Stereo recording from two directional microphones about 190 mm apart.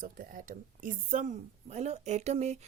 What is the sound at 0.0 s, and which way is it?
A woman's voice, 45° right (ahead or behind).